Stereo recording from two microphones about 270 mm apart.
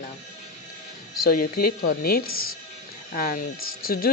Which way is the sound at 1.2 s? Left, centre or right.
Left.